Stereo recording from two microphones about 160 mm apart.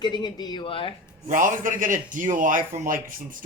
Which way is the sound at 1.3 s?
55° right (ahead or behind).